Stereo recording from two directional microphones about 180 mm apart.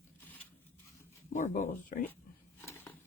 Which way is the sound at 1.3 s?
45° left (ahead or behind).